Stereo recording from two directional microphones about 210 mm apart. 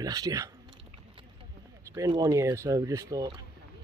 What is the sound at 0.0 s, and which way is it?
Speech, 15° right (ahead or behind).